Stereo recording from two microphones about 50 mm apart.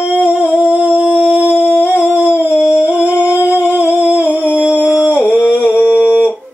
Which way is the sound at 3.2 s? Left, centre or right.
Right.